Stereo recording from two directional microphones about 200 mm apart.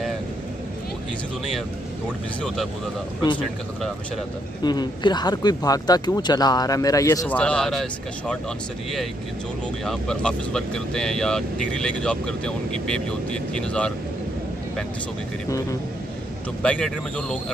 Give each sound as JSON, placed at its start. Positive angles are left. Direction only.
{"t": 2.4, "sound": "speech", "side_deg": 0}
{"t": 4.6, "sound": "speech", "side_deg": 20}
{"t": 9.8, "sound": "speech", "side_deg": 5}
{"t": 16.6, "sound": "speech", "side_deg": 5}